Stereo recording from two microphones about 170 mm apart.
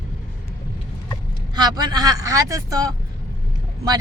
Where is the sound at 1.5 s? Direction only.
25° right (ahead or behind).